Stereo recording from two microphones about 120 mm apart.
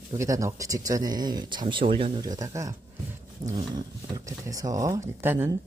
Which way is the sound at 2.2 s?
30° right (ahead or behind).